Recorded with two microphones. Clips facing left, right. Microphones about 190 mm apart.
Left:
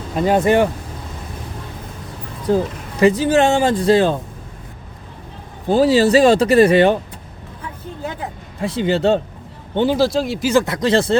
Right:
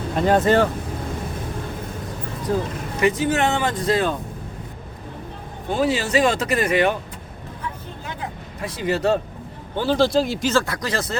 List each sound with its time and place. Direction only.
0.2 s speech: 10° left (ahead or behind)
3.0 s speech: 30° left (ahead or behind)
5.6 s speech: 35° left (ahead or behind)
8.6 s speech: 25° left (ahead or behind)
10.0 s speech: centre (ahead or behind)
10.5 s speech: 20° left (ahead or behind)